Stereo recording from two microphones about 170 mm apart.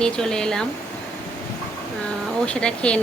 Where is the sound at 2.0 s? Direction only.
5° left (ahead or behind).